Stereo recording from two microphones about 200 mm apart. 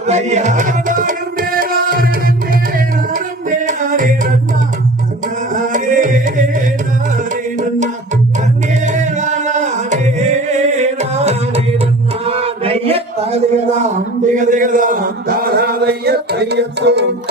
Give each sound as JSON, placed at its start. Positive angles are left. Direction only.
{"t": 0.0, "sound": "music", "side_deg": -35}
{"t": 5.5, "sound": "music", "side_deg": -40}
{"t": 8.8, "sound": "singing", "side_deg": -35}
{"t": 12.2, "sound": "male singing", "side_deg": -30}
{"t": 14.3, "sound": "a man's voice", "side_deg": -40}